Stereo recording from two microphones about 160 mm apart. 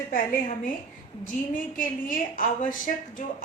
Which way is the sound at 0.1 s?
55° left (ahead or behind).